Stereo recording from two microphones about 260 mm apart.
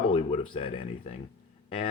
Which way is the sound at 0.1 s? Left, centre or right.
Left.